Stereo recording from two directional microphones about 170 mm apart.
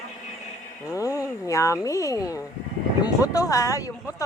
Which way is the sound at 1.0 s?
20° left (ahead or behind).